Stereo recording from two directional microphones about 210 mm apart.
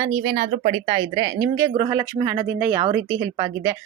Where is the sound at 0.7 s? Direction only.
25° right (ahead or behind).